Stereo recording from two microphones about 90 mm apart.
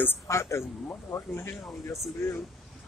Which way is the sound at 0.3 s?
30° left (ahead or behind).